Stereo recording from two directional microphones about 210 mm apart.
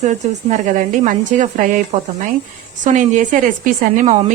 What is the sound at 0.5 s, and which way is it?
A woman's voice, 35° right (ahead or behind).